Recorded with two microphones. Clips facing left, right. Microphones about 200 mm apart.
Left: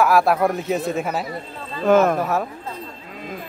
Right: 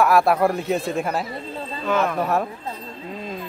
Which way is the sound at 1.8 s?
45° left (ahead or behind).